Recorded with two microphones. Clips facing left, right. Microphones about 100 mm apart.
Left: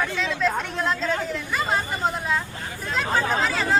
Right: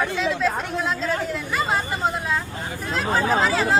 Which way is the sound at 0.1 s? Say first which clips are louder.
Right 2 dB; centre (ahead or behind).